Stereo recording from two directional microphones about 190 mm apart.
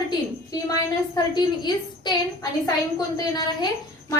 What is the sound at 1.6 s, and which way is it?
Speech, 25° left (ahead or behind).